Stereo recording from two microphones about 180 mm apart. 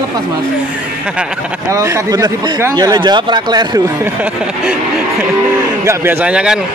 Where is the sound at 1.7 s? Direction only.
15° right (ahead or behind).